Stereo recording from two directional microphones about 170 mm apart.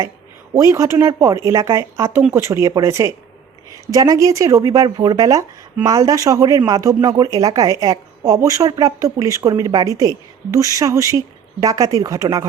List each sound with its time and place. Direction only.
0.5 s speech: 20° right (ahead or behind)